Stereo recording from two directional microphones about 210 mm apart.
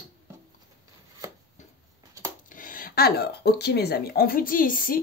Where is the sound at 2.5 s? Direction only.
40° left (ahead or behind).